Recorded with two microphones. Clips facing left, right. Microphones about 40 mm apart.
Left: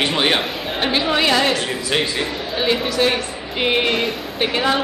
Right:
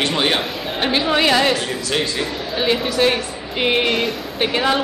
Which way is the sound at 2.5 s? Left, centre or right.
Centre.